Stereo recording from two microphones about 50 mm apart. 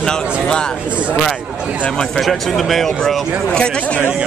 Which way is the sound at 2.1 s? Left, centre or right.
Centre.